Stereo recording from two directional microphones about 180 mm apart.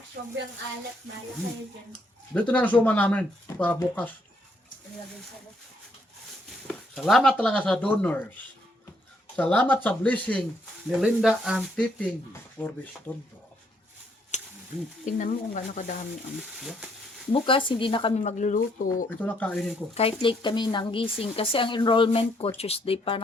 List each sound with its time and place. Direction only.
1.9 s speech: 5° left (ahead or behind)
6.7 s speech: centre (ahead or behind)
9.3 s speech: 10° left (ahead or behind)
10.8 s speech: 5° right (ahead or behind)
14.3 s a sound: 40° left (ahead or behind)
15.0 s speech: 45° left (ahead or behind)
16.4 s speech: 5° right (ahead or behind)
17.3 s speech: 30° left (ahead or behind)
18.2 s speech: 40° left (ahead or behind)
19.2 s speech: 5° left (ahead or behind)
19.9 s speech: 30° left (ahead or behind)